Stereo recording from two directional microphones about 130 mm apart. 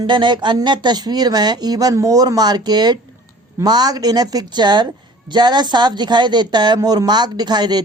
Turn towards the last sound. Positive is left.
turn(degrees=-35)  # may be behind; listen again after turning